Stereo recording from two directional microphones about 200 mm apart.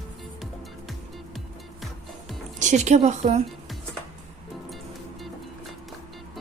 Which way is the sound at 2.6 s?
35° right (ahead or behind).